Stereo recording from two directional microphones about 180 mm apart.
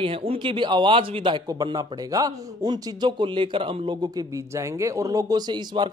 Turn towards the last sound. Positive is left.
turn(degrees=-25)  # may be behind; listen again after turning